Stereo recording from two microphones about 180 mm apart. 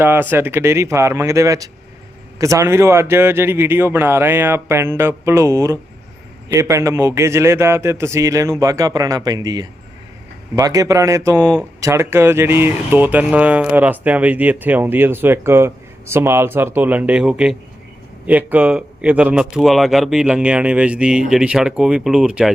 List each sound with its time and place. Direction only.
0.0 s speech: 10° right (ahead or behind)